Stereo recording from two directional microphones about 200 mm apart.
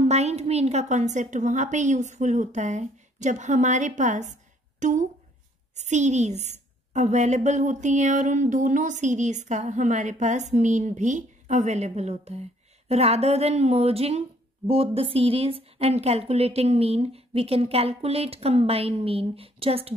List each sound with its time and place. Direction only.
0.0 s a woman's voice: 35° right (ahead or behind)